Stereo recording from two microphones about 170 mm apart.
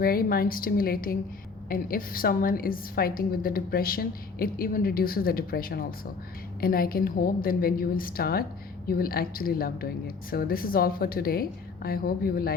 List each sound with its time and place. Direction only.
0.0 s a woman's voice: 60° left (ahead or behind)